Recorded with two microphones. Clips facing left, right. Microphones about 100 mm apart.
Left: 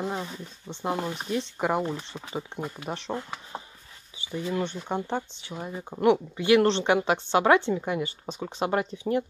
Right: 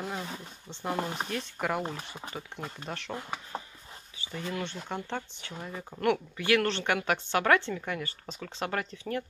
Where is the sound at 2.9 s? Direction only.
20° left (ahead or behind).